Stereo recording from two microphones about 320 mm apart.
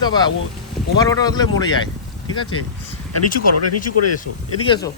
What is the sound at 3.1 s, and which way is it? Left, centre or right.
Speech, left.